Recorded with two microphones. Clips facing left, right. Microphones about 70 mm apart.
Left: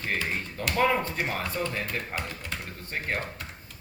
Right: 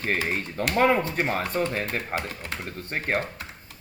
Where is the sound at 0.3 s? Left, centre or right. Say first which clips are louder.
Right 4 dB; right.